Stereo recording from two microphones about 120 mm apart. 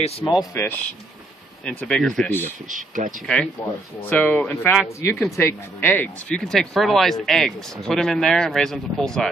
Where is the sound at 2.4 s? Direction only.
90° right.